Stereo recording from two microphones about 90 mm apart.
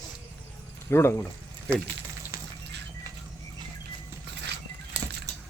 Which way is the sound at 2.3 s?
35° right (ahead or behind).